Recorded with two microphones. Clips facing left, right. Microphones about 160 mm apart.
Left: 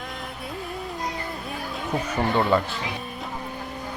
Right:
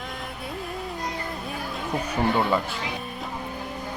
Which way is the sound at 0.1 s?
Centre (ahead or behind).